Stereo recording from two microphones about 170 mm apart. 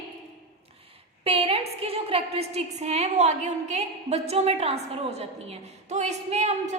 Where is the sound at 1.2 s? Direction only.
35° right (ahead or behind).